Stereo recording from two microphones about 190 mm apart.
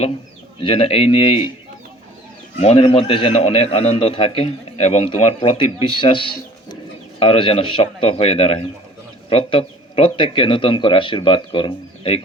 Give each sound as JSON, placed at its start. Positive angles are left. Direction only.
{"t": 0.6, "sound": "a man's voice", "side_deg": 30}
{"t": 2.6, "sound": "a man's voice", "side_deg": 30}